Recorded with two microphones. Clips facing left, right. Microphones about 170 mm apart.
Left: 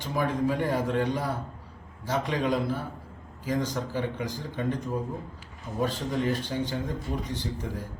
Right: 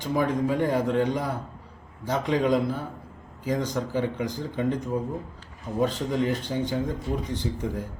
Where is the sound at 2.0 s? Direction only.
20° right (ahead or behind).